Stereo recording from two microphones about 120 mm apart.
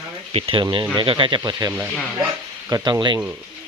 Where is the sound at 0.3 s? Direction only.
50° right (ahead or behind).